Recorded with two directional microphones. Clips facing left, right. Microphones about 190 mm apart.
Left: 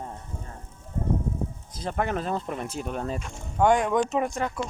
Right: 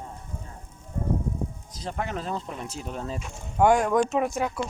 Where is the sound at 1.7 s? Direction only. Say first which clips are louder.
Left 5 dB; 55° left (ahead or behind).